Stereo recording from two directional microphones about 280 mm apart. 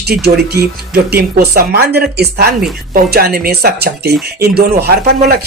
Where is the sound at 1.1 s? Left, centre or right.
Right.